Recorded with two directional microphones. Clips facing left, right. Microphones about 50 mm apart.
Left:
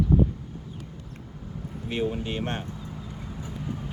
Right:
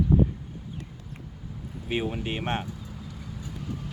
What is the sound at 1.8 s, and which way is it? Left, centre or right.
Speech, right.